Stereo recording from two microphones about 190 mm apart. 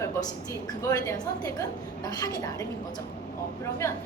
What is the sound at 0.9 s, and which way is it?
A woman's voice, 20° left (ahead or behind).